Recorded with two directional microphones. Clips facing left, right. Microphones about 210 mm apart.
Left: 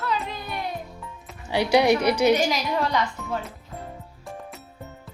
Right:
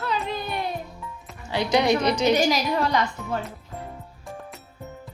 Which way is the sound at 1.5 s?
10° left (ahead or behind).